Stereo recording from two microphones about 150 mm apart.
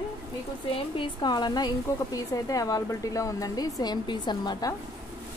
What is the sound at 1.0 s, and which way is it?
A woman's voice, 30° left (ahead or behind).